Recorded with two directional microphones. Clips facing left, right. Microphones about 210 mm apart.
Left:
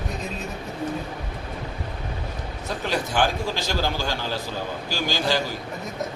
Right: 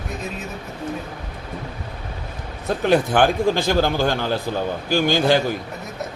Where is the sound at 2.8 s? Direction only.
55° right (ahead or behind).